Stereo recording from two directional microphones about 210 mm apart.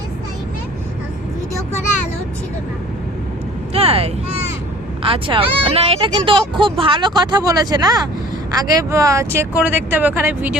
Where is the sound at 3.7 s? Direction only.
30° right (ahead or behind).